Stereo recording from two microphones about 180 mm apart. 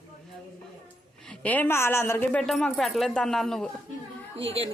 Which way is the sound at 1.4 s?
10° left (ahead or behind).